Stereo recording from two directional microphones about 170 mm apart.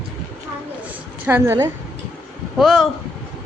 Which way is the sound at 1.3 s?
10° right (ahead or behind).